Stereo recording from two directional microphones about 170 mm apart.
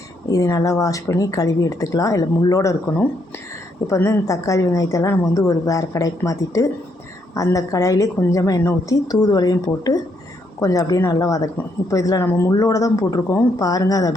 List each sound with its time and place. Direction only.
0.3 s speech: 20° left (ahead or behind)
3.8 s speech: 15° left (ahead or behind)